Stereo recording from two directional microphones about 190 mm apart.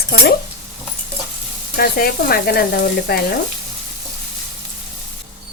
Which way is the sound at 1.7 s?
55° left (ahead or behind).